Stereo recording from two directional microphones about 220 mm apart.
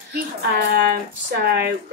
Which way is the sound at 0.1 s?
50° right (ahead or behind).